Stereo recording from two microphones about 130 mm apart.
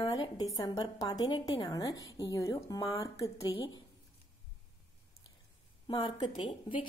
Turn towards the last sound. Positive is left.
turn(degrees=40)  # may be behind; listen again after turning